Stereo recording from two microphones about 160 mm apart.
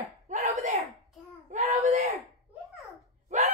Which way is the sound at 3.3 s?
50° right (ahead or behind).